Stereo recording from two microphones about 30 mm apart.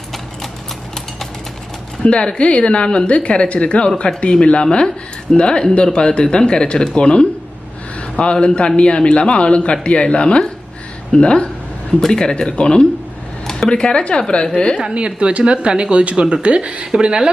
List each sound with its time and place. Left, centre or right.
2.0 s a man's voice: left
14.8 s speech: right
16.8 s a woman's voice: right